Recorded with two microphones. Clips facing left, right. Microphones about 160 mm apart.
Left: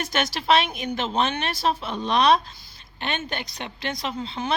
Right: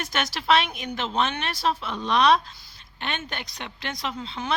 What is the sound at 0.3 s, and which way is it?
Speech, 40° left (ahead or behind).